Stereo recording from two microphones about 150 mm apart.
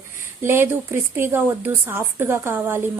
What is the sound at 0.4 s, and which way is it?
A woman's voice, 15° right (ahead or behind).